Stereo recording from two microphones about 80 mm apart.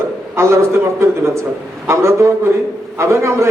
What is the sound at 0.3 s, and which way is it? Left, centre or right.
A man's voice, right.